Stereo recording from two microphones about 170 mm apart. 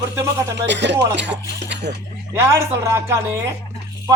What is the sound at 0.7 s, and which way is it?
Speech, 90° right.